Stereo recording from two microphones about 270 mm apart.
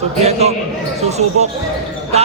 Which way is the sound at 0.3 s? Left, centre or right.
Right.